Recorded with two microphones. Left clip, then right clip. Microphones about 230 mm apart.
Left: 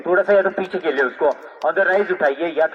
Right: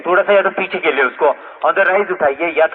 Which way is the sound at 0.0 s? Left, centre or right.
Right.